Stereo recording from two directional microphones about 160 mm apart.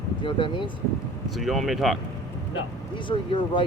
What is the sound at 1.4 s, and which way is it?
Speech, centre (ahead or behind).